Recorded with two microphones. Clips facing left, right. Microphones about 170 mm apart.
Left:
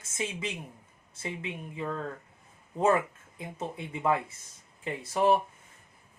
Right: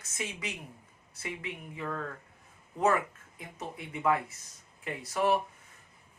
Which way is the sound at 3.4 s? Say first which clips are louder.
Left 5 dB; 25° left (ahead or behind).